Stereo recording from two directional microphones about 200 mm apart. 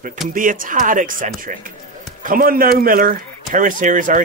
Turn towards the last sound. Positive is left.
turn(degrees=-40)  # may be behind; listen again after turning